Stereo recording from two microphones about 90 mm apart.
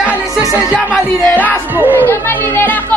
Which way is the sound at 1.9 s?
25° left (ahead or behind).